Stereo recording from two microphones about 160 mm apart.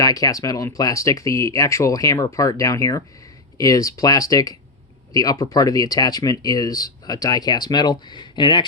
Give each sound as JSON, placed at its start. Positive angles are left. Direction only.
{"t": 0.0, "sound": "speech", "side_deg": 20}